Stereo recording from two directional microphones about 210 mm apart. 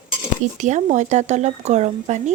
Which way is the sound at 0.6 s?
35° right (ahead or behind).